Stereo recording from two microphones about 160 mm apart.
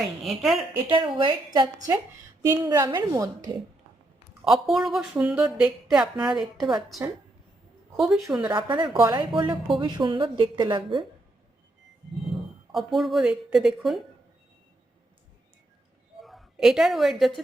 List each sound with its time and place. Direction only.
0.3 s speech: centre (ahead or behind)
0.9 s a woman's voice: 30° right (ahead or behind)
4.4 s speech: centre (ahead or behind)
6.6 s a woman's voice: 25° right (ahead or behind)
7.9 s speech: centre (ahead or behind)
8.5 s a woman's voice: 30° right (ahead or behind)
12.7 s speech: centre (ahead or behind)
16.2 s a woman's voice: centre (ahead or behind)